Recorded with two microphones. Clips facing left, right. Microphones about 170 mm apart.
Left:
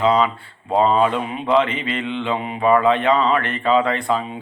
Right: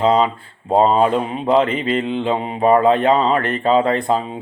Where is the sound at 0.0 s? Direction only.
45° right (ahead or behind).